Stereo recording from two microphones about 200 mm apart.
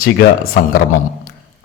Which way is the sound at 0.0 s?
45° left (ahead or behind).